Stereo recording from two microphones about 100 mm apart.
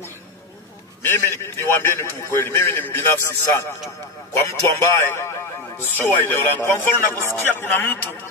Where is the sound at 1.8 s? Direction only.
25° left (ahead or behind).